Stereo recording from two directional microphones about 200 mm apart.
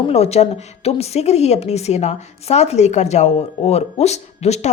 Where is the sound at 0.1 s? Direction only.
30° left (ahead or behind).